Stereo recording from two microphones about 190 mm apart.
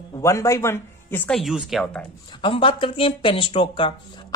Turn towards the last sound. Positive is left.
turn(degrees=25)  # may be behind; listen again after turning